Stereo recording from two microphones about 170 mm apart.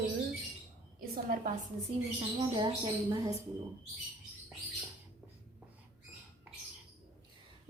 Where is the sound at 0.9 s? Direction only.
60° right (ahead or behind).